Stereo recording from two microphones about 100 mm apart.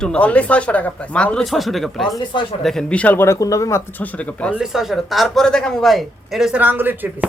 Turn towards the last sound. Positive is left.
turn(degrees=-20)  # may be behind; listen again after turning